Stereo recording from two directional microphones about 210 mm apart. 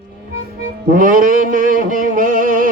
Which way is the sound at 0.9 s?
40° right (ahead or behind).